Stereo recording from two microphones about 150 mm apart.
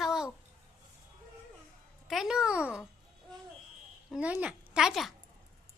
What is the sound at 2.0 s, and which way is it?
Speech, centre (ahead or behind).